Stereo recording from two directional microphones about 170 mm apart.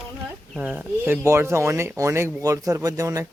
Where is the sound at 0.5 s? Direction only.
10° right (ahead or behind).